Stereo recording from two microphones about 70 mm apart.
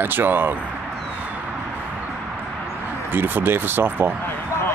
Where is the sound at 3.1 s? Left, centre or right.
Right.